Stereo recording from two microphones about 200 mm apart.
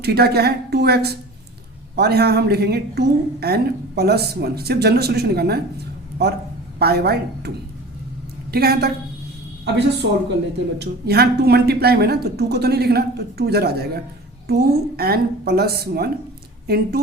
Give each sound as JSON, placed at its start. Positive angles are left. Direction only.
{"t": 0.0, "sound": "a woman's voice", "side_deg": -50}
{"t": 6.7, "sound": "a woman's voice", "side_deg": -50}